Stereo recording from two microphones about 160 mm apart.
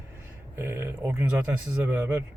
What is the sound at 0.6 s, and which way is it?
Speech, 15° right (ahead or behind).